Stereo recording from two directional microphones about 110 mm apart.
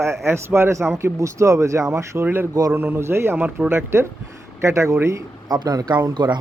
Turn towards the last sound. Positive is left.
turn(degrees=-45)  # may be behind; listen again after turning